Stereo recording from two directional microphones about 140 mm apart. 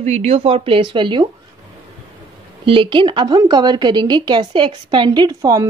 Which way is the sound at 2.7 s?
35° right (ahead or behind).